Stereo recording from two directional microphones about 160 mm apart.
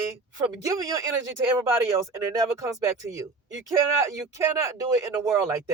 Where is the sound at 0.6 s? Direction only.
20° right (ahead or behind).